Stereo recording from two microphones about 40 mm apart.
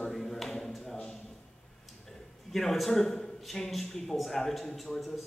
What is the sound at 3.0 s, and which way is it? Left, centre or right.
Speech, centre.